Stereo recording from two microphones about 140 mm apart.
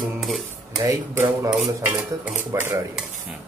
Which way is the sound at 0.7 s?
20° right (ahead or behind).